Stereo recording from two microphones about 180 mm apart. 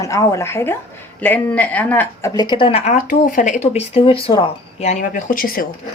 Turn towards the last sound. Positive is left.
turn(degrees=55)  # may be behind; listen again after turning